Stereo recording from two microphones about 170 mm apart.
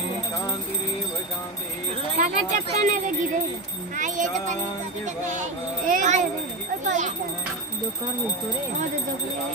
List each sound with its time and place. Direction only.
2.1 s speech: 50° right (ahead or behind)
3.9 s a sound: 45° right (ahead or behind)
5.0 s speech: 45° right (ahead or behind)